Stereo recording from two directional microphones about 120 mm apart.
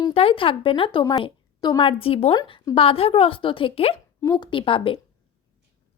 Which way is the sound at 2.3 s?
35° left (ahead or behind).